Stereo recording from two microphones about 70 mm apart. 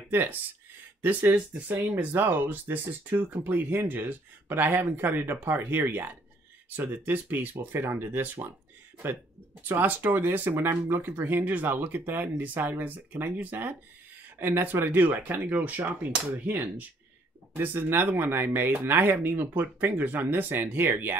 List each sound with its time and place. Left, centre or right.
0.1 s speech: right